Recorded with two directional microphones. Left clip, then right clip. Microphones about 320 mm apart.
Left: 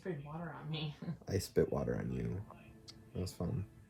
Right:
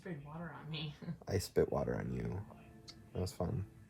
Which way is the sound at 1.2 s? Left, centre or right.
Centre.